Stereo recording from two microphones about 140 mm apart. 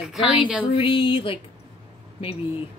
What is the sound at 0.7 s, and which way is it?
Speech, 40° left (ahead or behind).